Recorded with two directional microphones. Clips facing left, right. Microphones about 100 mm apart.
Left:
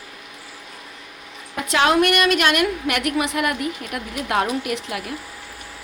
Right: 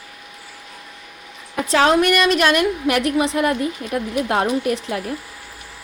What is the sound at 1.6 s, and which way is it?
A woman's voice, 35° right (ahead or behind).